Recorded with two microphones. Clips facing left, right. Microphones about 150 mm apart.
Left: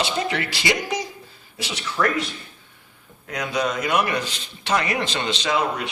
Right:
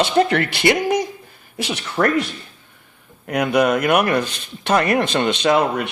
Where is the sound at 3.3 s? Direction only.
60° right (ahead or behind).